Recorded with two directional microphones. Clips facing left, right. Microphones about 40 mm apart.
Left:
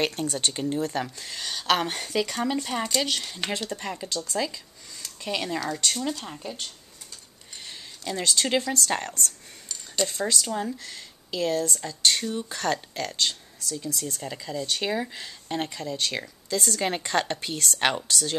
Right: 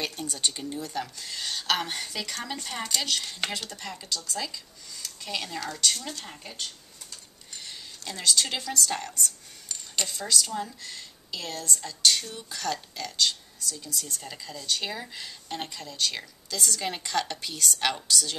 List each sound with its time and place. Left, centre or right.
0.0 s speech: left
1.4 s speech: centre
1.7 s speech: left
2.3 s speech: centre
8.1 s speech: left
8.8 s speech: left
12.5 s speech: left
14.2 s speech: centre